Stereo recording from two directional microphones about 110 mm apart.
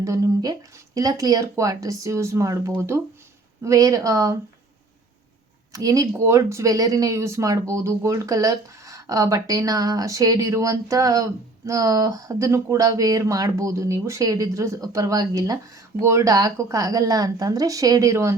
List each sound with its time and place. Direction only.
0.0 s speech: 30° right (ahead or behind)
5.7 s speech: 30° right (ahead or behind)